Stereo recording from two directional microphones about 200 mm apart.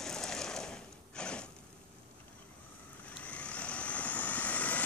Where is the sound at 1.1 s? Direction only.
5° left (ahead or behind).